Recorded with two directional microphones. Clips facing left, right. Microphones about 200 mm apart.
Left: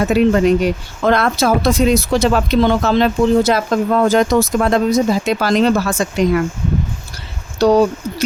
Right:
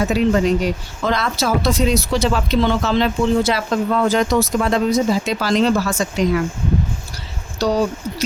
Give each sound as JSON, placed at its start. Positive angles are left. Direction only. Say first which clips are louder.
{"t": 0.1, "sound": "speech", "louder": "left 4 dB", "side_deg": 60}
{"t": 7.6, "sound": "speech", "louder": "left 7 dB", "side_deg": 55}